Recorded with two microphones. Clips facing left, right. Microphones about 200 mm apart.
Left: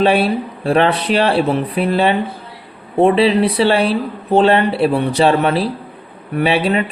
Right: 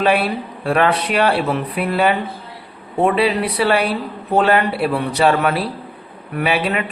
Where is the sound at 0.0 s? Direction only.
30° left (ahead or behind).